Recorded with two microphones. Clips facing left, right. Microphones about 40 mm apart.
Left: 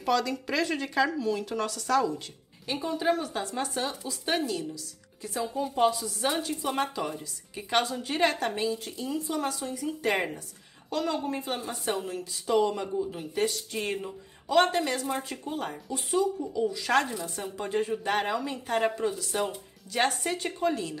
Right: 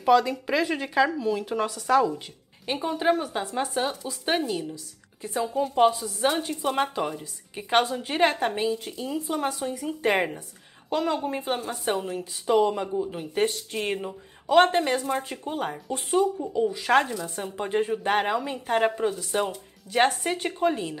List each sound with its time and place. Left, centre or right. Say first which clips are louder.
0.0 s speech: right 6 dB; centre
2.6 s a woman's voice: right 3 dB; right
13.4 s speech: right 3 dB; right
13.7 s a woman's voice: right 3 dB; right
16.3 s a woman's voice: right 3 dB; right